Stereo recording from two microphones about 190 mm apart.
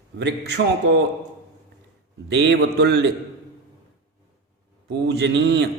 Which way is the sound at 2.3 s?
65° right (ahead or behind).